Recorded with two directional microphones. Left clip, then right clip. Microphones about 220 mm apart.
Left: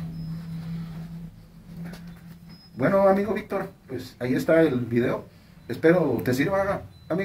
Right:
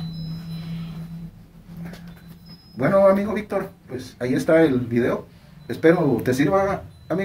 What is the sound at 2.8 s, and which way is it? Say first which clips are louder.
Speech: right 3 dB; 5° right (ahead or behind).